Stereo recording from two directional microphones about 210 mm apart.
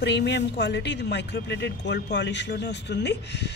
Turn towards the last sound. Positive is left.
turn(degrees=55)  # may be behind; listen again after turning